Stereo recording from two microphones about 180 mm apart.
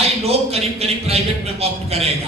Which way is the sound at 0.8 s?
35° right (ahead or behind).